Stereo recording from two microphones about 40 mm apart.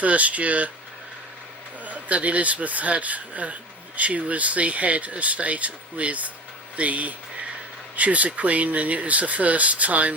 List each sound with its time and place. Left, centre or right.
0.0 s speech: right
1.8 s speech: right